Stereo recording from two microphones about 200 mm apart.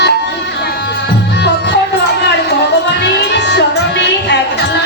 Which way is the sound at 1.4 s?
60° left (ahead or behind).